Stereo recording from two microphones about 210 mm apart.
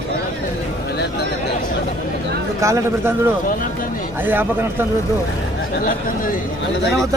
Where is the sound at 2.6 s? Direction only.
15° right (ahead or behind).